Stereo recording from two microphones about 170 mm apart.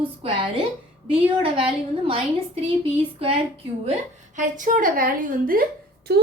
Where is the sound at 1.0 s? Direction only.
30° right (ahead or behind).